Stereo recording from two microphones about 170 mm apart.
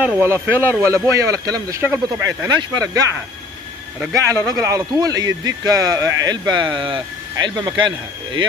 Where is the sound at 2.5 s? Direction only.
25° right (ahead or behind).